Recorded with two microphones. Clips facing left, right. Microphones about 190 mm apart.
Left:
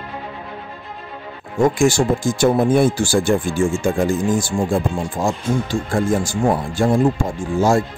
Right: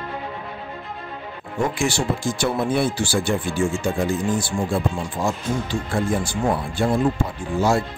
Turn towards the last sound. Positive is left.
turn(degrees=45)  # may be behind; listen again after turning